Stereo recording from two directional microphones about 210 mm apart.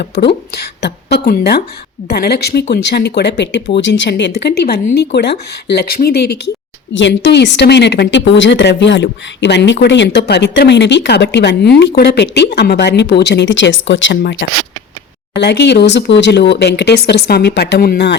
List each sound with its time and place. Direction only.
0.0 s a woman's voice: 50° left (ahead or behind)